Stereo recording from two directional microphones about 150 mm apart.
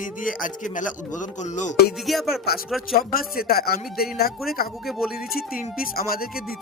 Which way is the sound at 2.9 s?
80° left.